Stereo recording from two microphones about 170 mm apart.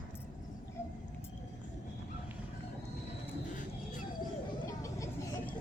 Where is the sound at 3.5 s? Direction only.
50° left (ahead or behind).